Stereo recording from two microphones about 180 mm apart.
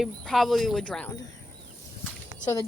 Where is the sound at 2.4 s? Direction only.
20° left (ahead or behind).